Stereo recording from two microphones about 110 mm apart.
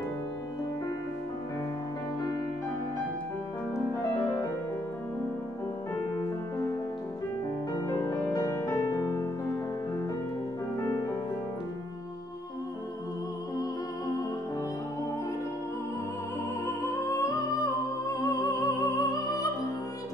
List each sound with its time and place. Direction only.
3.7 s music: 25° left (ahead or behind)
7.9 s music: 25° left (ahead or behind)
16.6 s music: 30° left (ahead or behind)